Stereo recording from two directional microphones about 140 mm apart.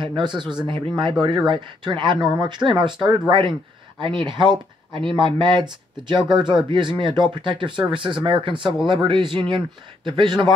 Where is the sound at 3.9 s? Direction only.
35° right (ahead or behind).